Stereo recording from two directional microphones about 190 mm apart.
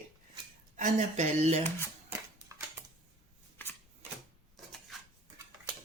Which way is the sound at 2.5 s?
15° right (ahead or behind).